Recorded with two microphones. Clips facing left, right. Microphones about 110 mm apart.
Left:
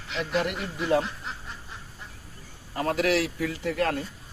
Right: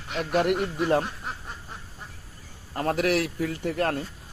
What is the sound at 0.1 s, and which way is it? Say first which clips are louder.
Speech: right 4 dB; 50° right (ahead or behind).